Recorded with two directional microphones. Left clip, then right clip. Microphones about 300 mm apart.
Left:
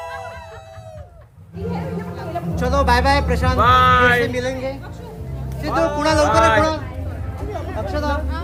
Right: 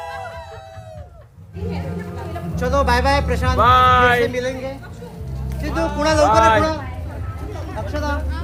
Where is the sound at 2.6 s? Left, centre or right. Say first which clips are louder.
Even; centre.